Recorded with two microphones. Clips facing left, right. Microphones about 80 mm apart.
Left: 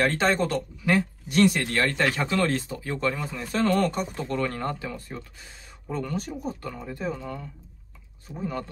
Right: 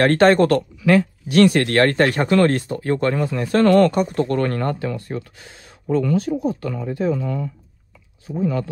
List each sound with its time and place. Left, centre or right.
0.0 s speech: right
3.5 s speech: right